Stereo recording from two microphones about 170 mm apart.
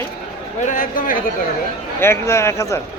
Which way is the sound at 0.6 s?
50° left (ahead or behind).